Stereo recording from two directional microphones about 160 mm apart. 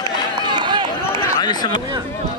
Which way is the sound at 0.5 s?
30° right (ahead or behind).